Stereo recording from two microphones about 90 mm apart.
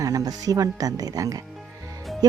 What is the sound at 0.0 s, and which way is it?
Speech, 40° right (ahead or behind).